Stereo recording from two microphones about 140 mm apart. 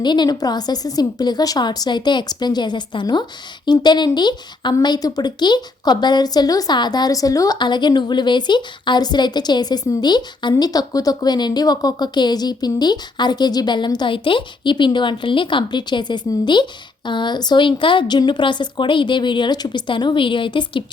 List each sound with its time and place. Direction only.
0.0 s speech: 30° left (ahead or behind)